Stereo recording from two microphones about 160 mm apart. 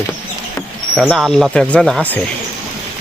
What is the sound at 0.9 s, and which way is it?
Speech, centre (ahead or behind).